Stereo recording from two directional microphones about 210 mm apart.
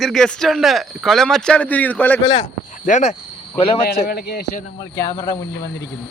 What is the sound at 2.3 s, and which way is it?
Speech, 30° left (ahead or behind).